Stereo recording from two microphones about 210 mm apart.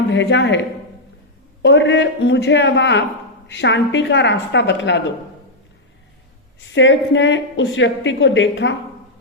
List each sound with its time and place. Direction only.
0.1 s a woman's voice: 55° left (ahead or behind)
1.6 s a woman's voice: 60° left (ahead or behind)
6.7 s a woman's voice: 60° left (ahead or behind)